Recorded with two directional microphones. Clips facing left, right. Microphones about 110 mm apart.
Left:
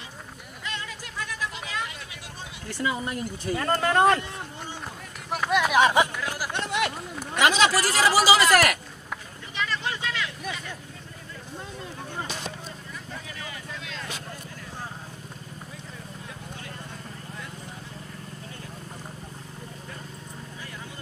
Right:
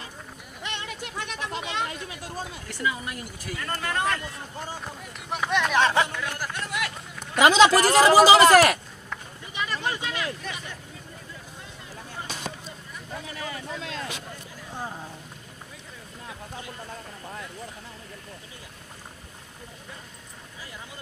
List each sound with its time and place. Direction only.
1.0 s a sound: 25° right (ahead or behind)
2.8 s speech: 30° left (ahead or behind)
4.8 s run: centre (ahead or behind)
6.5 s a sound: 25° left (ahead or behind)
7.3 s a man's voice: 45° right (ahead or behind)
9.6 s vehicle: 15° right (ahead or behind)
13.5 s vehicle: 40° right (ahead or behind)